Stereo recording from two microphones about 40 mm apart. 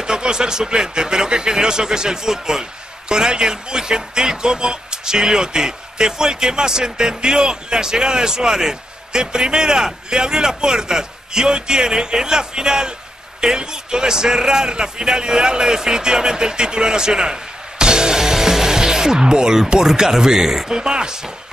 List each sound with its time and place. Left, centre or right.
0.0 s a man's voice: centre